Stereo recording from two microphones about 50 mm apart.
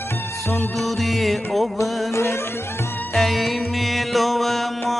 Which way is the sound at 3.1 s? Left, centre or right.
Centre.